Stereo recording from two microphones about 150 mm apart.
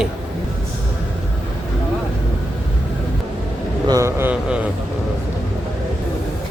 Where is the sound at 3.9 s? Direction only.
20° right (ahead or behind).